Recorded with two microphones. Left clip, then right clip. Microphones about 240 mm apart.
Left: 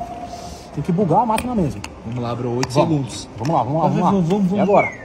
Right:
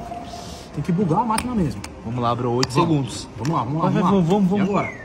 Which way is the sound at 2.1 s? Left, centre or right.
Centre.